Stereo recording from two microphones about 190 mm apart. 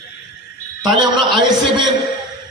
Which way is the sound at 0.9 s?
25° right (ahead or behind).